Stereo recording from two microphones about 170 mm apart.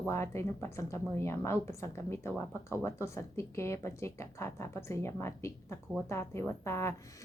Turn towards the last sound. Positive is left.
turn(degrees=15)  # may be behind; listen again after turning